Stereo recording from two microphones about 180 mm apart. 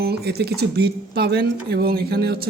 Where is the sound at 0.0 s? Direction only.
65° right (ahead or behind).